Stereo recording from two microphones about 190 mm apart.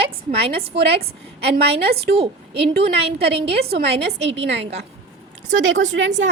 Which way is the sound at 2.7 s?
60° right (ahead or behind).